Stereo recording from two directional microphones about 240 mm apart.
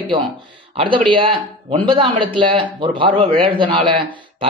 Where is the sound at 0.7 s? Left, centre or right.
Right.